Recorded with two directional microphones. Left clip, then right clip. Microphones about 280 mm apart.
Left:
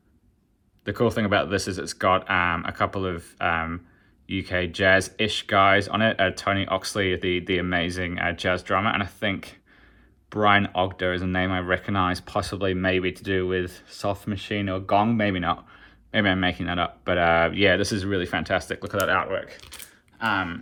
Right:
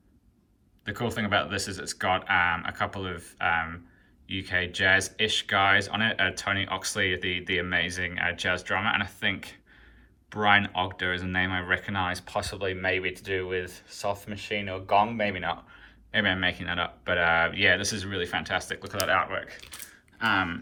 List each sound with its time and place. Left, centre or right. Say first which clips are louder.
0.9 s speech: left 6 dB; centre